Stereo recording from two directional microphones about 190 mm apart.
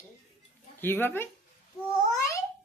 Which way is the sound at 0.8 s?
10° left (ahead or behind).